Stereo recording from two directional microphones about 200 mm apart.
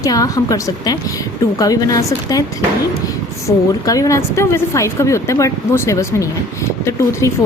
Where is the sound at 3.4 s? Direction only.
15° left (ahead or behind).